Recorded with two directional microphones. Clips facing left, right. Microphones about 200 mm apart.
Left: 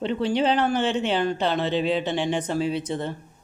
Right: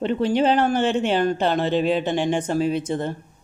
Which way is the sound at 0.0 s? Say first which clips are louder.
Right 3 dB; 50° right (ahead or behind).